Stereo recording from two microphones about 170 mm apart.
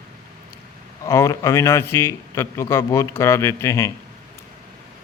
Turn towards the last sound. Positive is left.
turn(degrees=15)  # may be behind; listen again after turning